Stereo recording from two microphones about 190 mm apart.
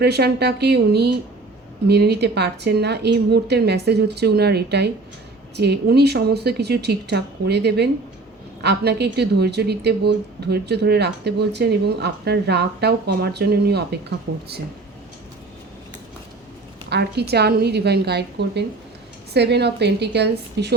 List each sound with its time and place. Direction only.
0.0 s speech: 60° right (ahead or behind)
16.9 s speech: 60° right (ahead or behind)